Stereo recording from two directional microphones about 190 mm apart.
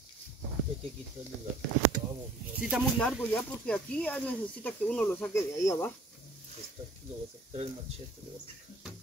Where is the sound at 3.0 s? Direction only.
5° left (ahead or behind).